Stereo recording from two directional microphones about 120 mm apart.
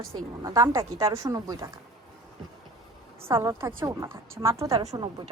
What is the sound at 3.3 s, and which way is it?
Speech, 20° right (ahead or behind).